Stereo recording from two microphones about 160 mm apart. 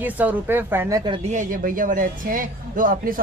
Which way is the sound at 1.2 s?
50° right (ahead or behind).